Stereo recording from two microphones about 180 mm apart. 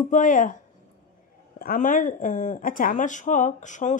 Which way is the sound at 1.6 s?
50° left (ahead or behind).